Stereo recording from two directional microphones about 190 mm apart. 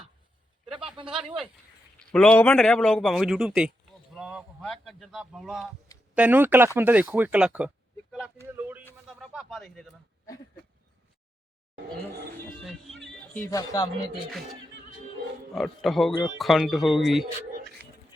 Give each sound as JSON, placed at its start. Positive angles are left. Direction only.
{"t": 1.0, "sound": "speech", "side_deg": -25}
{"t": 2.0, "sound": "a man's voice", "side_deg": 5}
{"t": 8.5, "sound": "a sound", "side_deg": -10}
{"t": 9.0, "sound": "speech", "side_deg": 0}
{"t": 12.6, "sound": "speech", "side_deg": 0}
{"t": 13.5, "sound": "speech", "side_deg": 20}
{"t": 15.5, "sound": "a man's voice", "side_deg": 0}